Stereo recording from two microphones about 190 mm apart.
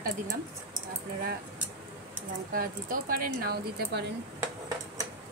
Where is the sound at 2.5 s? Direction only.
50° right (ahead or behind).